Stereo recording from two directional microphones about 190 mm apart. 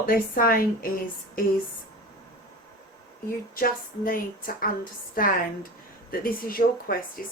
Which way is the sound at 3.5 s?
45° left (ahead or behind).